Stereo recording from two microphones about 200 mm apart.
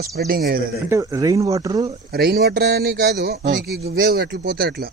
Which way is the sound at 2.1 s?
50° right (ahead or behind).